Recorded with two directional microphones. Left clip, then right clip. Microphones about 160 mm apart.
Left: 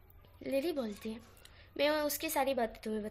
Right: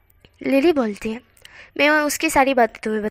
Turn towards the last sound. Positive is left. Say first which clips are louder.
# right 17 dB
turn(degrees=-40)  # may be behind; listen again after turning